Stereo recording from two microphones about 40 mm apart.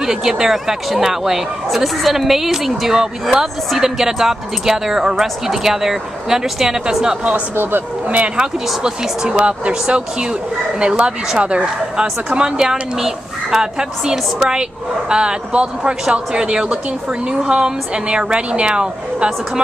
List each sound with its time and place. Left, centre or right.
0.0 s a woman's voice: centre
8.4 s a woman's voice: centre
9.4 s a woman's voice: right